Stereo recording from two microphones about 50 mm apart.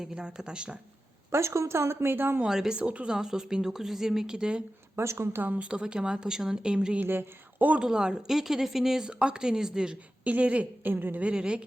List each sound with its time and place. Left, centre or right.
0.0 s a woman's voice: centre
1.3 s speech: right
2.5 s a woman's voice: centre
2.7 s a woman's voice: right
3.2 s a woman's voice: centre
4.9 s speech: right
5.5 s a woman's voice: centre
7.0 s speech: right
7.8 s a woman's voice: centre
9.0 s a woman's voice: centre
10.2 s a woman's voice: right
10.8 s a woman's voice: right
11.2 s a woman's voice: right